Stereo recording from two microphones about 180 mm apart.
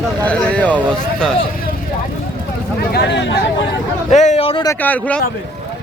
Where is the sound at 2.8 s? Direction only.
60° left (ahead or behind).